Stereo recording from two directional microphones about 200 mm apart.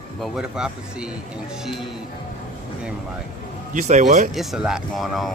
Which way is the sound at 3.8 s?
35° right (ahead or behind).